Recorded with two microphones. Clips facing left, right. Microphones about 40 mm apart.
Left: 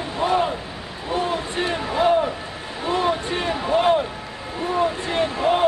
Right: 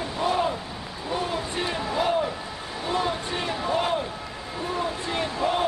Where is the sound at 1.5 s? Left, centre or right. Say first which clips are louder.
Left 3 dB; left.